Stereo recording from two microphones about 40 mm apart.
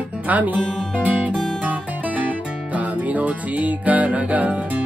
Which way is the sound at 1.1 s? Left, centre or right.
Right.